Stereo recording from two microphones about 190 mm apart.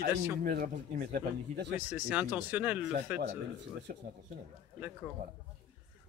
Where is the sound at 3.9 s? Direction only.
50° right (ahead or behind).